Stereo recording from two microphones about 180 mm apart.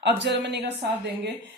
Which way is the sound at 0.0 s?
70° right (ahead or behind).